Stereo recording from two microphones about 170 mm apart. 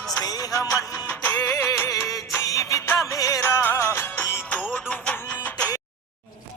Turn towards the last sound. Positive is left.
turn(degrees=10)  # may be behind; listen again after turning